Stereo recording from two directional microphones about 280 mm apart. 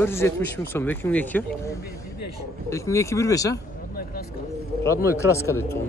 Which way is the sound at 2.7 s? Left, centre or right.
Centre.